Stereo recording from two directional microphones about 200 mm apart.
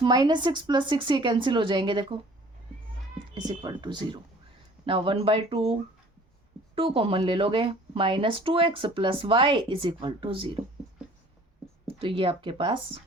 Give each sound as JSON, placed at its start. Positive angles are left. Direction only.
{"t": 0.0, "sound": "speech", "side_deg": -20}
{"t": 3.3, "sound": "speech", "side_deg": -20}
{"t": 6.7, "sound": "speech", "side_deg": -25}
{"t": 11.9, "sound": "speech", "side_deg": -25}